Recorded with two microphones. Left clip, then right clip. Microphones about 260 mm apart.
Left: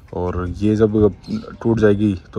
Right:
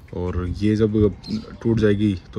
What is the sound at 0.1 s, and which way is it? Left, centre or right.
Speech, centre.